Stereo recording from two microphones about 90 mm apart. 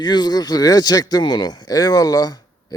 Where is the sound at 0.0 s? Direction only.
50° left (ahead or behind).